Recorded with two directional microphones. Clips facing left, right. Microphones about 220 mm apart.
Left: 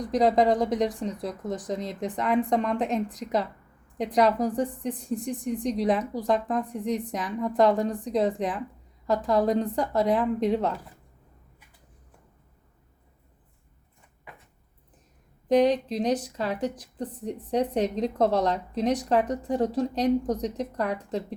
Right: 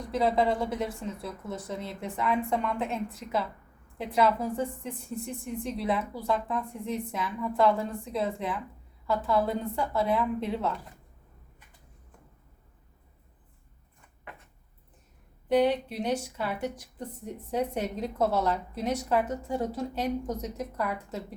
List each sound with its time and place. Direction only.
0.1 s a woman's voice: 40° left (ahead or behind)
15.4 s a woman's voice: 35° left (ahead or behind)